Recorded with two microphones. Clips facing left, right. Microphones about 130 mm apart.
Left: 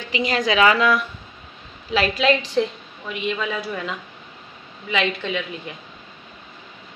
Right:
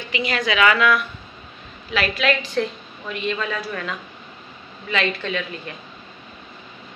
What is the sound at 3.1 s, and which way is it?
A woman's voice, 10° left (ahead or behind).